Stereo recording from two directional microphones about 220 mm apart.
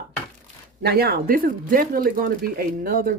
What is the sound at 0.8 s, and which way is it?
Speech, 45° right (ahead or behind).